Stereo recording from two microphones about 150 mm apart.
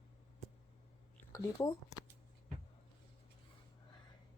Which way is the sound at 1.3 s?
20° left (ahead or behind).